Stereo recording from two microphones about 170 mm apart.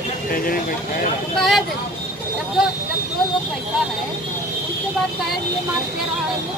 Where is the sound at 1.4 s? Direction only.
Centre (ahead or behind).